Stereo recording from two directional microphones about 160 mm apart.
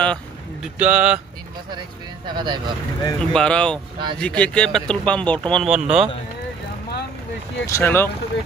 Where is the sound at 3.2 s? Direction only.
5° left (ahead or behind).